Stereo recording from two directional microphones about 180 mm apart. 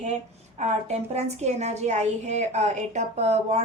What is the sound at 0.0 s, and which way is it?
A woman's voice, 40° right (ahead or behind).